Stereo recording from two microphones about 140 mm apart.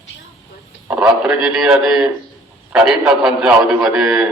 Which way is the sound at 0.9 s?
10° right (ahead or behind).